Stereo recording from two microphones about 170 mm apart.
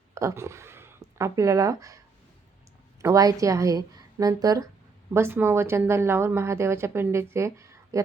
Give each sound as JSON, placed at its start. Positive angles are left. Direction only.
{"t": 0.1, "sound": "speech", "side_deg": -20}
{"t": 3.0, "sound": "a woman's voice", "side_deg": -20}